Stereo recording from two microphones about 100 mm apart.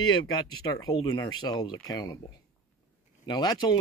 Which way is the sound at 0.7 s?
40° left (ahead or behind).